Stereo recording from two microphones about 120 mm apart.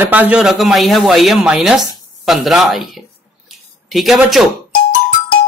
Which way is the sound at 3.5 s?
Centre (ahead or behind).